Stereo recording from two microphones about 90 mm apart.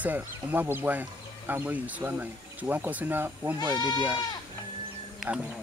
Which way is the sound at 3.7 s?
55° left (ahead or behind).